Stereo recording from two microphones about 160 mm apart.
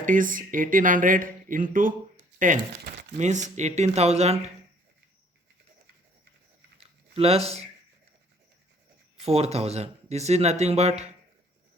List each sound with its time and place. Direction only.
0.0 s speech: 55° right (ahead or behind)
7.2 s speech: 40° right (ahead or behind)
9.1 s speech: 40° right (ahead or behind)